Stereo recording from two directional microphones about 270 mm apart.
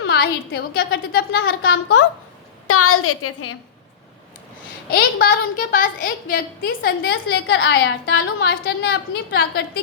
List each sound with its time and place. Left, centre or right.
0.0 s a woman's voice: left
1.7 s a woman's voice: left
4.9 s a woman's voice: left